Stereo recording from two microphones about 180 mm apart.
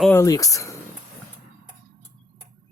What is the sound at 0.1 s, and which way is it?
Speech, 15° left (ahead or behind).